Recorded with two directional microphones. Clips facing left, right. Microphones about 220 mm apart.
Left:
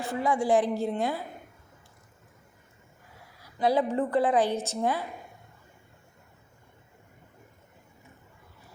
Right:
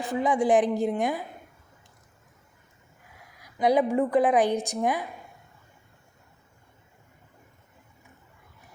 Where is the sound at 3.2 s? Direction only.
15° right (ahead or behind).